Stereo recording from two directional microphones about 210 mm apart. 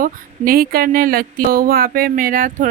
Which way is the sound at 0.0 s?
45° right (ahead or behind).